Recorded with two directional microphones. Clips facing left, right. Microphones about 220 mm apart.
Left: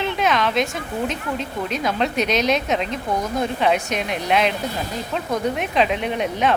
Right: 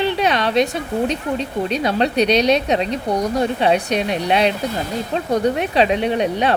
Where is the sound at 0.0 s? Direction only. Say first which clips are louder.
Right 3 dB; 35° right (ahead or behind).